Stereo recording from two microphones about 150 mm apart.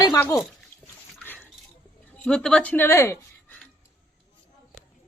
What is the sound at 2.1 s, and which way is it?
Speech, 5° left (ahead or behind).